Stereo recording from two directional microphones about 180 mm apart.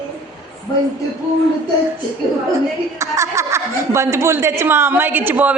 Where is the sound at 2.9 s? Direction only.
15° right (ahead or behind).